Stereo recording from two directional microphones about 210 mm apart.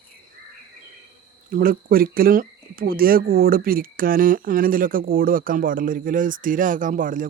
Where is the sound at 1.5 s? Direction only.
45° right (ahead or behind).